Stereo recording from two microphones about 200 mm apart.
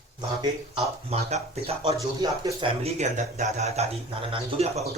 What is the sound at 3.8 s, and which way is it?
Speech, 30° right (ahead or behind).